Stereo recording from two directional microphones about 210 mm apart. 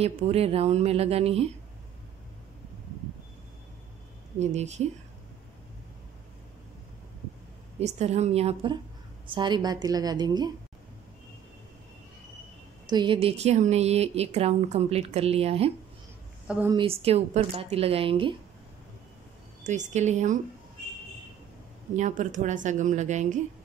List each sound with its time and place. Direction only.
0.0 s speech: 30° right (ahead or behind)
4.4 s a woman's voice: 35° right (ahead or behind)
7.8 s a woman's voice: 30° right (ahead or behind)
12.8 s speech: 20° right (ahead or behind)
16.4 s a woman's voice: 5° right (ahead or behind)
16.7 s speech: 25° right (ahead or behind)
19.6 s a woman's voice: 35° right (ahead or behind)
21.9 s a woman's voice: 35° right (ahead or behind)